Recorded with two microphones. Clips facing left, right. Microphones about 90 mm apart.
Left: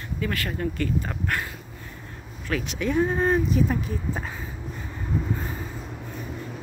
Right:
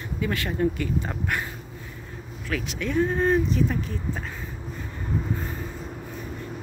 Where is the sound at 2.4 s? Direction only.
Centre (ahead or behind).